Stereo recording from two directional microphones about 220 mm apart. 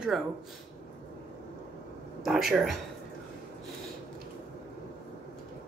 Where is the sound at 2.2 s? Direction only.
Centre (ahead or behind).